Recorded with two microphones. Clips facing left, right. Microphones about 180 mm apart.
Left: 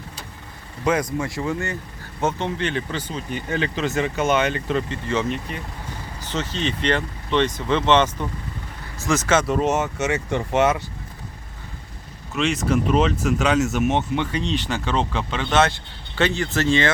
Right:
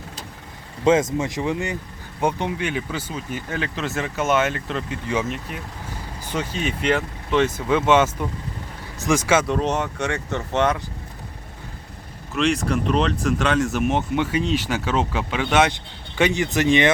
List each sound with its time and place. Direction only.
0.9 s speech: 25° right (ahead or behind)
9.5 s speech: 5° left (ahead or behind)
12.3 s speech: centre (ahead or behind); by 16.9 s 15° right (ahead or behind)